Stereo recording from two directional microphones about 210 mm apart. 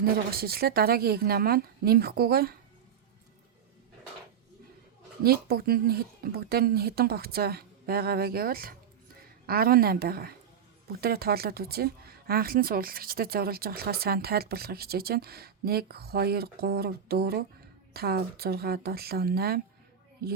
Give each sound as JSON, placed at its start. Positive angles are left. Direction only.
{"t": 0.0, "sound": "speech", "side_deg": -45}
{"t": 5.2, "sound": "speech", "side_deg": -45}